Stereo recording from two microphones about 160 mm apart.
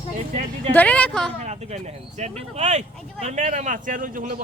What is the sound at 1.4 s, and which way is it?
Speech, 45° right (ahead or behind).